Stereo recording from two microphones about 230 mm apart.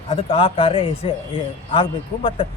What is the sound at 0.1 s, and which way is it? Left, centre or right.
Speech, left.